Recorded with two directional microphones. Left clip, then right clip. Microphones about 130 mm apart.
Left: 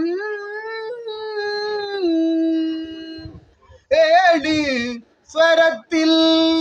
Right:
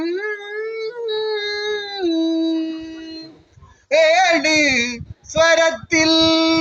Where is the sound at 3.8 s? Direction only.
30° left (ahead or behind).